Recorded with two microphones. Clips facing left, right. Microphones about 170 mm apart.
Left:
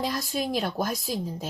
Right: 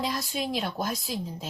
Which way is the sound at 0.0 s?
45° left (ahead or behind).